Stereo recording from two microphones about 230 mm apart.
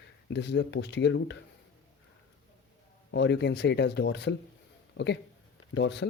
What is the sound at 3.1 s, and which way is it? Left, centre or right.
Speech, left.